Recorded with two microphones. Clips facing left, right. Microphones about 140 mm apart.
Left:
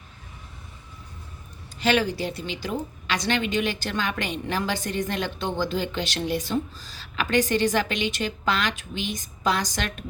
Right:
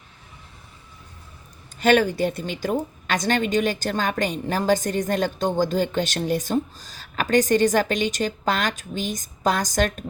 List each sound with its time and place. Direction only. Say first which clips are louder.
1.8 s a woman's voice: right 5 dB; 50° right (ahead or behind)